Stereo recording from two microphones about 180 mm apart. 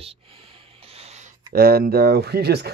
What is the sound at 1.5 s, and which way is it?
Speech, 55° right (ahead or behind).